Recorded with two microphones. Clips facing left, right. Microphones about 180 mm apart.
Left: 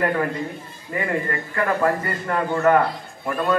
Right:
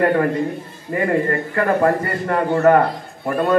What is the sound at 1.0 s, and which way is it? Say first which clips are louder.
A man's voice: right 7 dB; 40° right (ahead or behind).